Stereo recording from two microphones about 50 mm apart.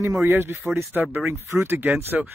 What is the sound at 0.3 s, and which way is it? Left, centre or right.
Speech, right.